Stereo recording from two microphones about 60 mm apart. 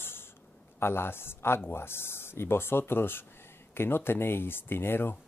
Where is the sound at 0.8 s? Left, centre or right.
Left.